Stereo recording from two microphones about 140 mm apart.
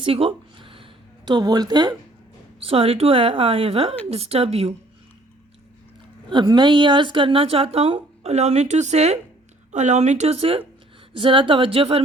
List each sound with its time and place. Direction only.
0.0 s a sound: 40° right (ahead or behind)
2.6 s a woman's voice: 45° right (ahead or behind)
6.2 s a woman's voice: 30° right (ahead or behind)